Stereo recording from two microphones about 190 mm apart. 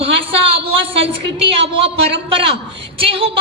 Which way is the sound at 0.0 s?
30° right (ahead or behind).